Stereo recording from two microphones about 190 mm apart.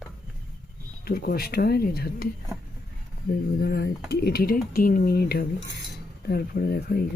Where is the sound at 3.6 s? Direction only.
60° left (ahead or behind).